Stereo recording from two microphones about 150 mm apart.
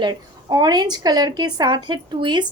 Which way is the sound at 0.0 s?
30° right (ahead or behind).